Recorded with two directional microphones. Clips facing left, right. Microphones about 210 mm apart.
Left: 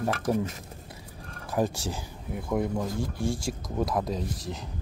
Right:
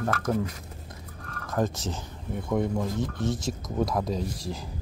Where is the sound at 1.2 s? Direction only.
15° left (ahead or behind).